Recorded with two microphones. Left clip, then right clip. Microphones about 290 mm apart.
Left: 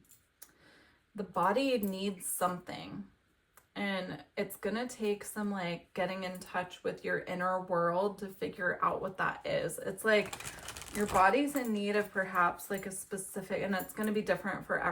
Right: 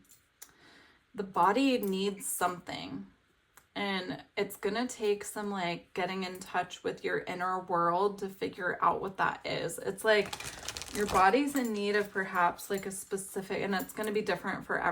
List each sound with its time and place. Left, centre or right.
1.3 s a woman's voice: right
10.2 s a sound: centre
11.1 s a woman's voice: centre